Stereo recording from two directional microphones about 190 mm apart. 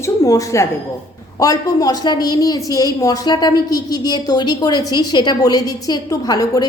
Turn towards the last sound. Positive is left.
turn(degrees=20)  # may be behind; listen again after turning